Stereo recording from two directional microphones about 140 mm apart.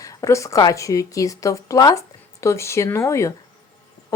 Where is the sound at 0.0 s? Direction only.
25° left (ahead or behind).